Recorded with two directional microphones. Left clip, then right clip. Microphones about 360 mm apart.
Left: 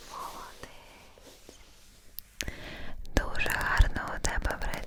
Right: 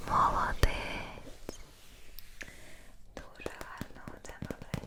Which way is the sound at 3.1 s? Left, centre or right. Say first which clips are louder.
Left 14 dB; left.